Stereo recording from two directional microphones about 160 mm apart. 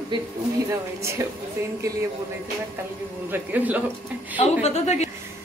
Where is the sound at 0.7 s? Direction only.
15° right (ahead or behind).